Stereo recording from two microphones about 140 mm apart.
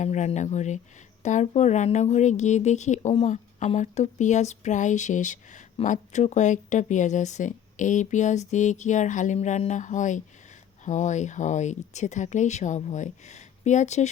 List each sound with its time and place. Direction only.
0.0 s speech: 55° left (ahead or behind)